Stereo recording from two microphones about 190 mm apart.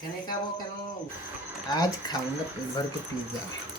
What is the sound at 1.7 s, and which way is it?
Speech, 20° left (ahead or behind).